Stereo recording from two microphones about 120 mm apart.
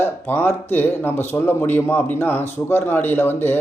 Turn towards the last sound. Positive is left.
turn(degrees=15)  # may be behind; listen again after turning